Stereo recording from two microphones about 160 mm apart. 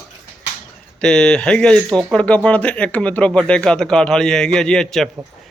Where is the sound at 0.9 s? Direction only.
5° left (ahead or behind).